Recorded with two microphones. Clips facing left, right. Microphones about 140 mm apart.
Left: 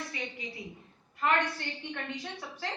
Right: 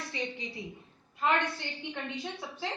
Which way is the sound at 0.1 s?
25° right (ahead or behind).